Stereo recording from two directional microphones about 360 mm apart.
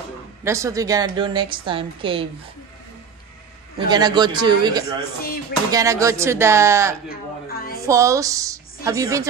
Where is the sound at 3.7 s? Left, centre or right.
Centre.